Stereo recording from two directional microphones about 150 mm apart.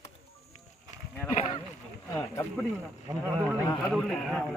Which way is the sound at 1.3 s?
40° left (ahead or behind).